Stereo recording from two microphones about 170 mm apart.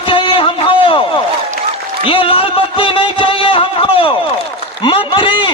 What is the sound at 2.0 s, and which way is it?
Music, 30° left (ahead or behind).